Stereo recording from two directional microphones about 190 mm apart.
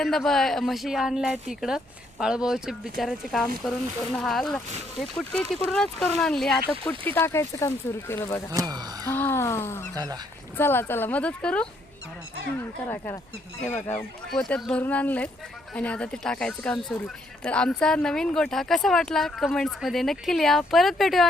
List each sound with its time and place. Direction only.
0.0 s speech: centre (ahead or behind)
8.5 s speech: 20° right (ahead or behind)
9.0 s speech: 10° left (ahead or behind)
9.9 s speech: 20° right (ahead or behind)
10.6 s speech: 10° left (ahead or behind)